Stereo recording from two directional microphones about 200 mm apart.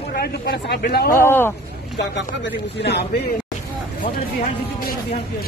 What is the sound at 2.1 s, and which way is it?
Speech, 60° left (ahead or behind).